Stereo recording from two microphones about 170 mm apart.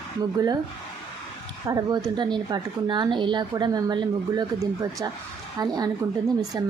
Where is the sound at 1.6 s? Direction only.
25° right (ahead or behind).